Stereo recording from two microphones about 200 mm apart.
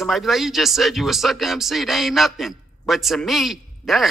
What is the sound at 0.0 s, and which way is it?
Speech, centre (ahead or behind).